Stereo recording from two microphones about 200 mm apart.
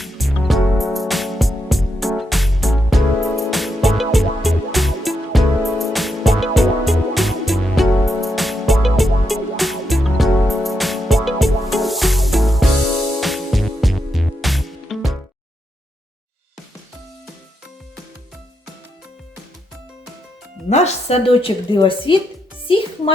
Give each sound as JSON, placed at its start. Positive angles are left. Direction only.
{"t": 0.0, "sound": "music", "side_deg": 0}
{"t": 20.7, "sound": "speech", "side_deg": 35}
{"t": 22.6, "sound": "music", "side_deg": 25}